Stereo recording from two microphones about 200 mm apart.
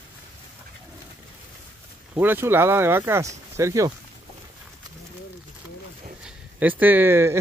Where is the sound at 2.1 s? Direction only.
10° right (ahead or behind).